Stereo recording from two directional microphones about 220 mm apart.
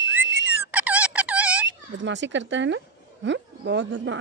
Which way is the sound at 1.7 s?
55° right (ahead or behind).